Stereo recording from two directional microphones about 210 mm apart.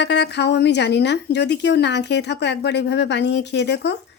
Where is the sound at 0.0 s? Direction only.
55° left (ahead or behind).